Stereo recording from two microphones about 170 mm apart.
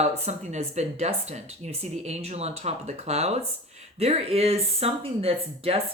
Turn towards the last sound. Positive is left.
turn(degrees=-35)  # may be behind; listen again after turning